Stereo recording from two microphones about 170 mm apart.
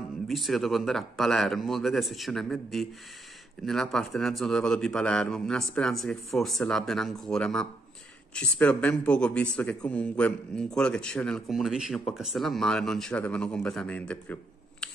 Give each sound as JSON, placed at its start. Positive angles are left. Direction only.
{"t": 0.3, "sound": "speech", "side_deg": 0}